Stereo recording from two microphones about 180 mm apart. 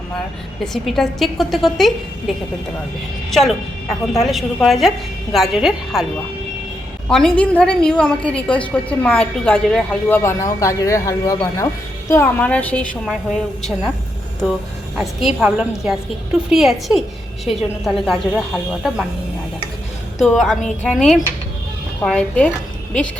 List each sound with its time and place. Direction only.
0.6 s a woman's voice: centre (ahead or behind)
4.1 s a woman's voice: centre (ahead or behind)
7.1 s a woman's voice: 5° left (ahead or behind)
14.9 s a woman's voice: centre (ahead or behind)
20.1 s a woman's voice: centre (ahead or behind)